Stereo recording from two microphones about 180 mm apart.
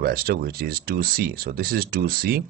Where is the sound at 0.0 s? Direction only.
55° right (ahead or behind).